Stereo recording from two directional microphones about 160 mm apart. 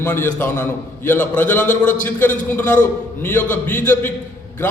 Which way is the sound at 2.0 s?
10° left (ahead or behind).